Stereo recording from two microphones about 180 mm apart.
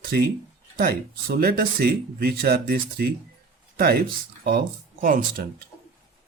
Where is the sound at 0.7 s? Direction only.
55° right (ahead or behind).